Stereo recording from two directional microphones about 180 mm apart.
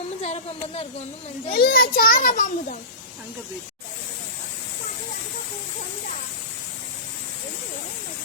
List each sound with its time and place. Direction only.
0.2 s speech: 35° left (ahead or behind)
1.5 s a child's voice: 55° left (ahead or behind)